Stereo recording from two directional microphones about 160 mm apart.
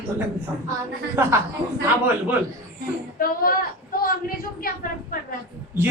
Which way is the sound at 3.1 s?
65° left (ahead or behind).